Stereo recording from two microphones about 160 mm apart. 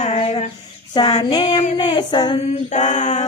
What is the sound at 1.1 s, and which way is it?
Music, 45° left (ahead or behind).